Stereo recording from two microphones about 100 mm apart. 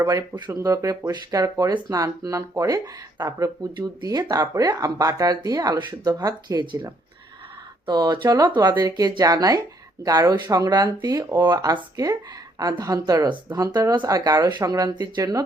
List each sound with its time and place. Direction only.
0.0 s speech: 40° right (ahead or behind)
0.5 s speech: 30° right (ahead or behind)
7.9 s speech: 45° right (ahead or behind)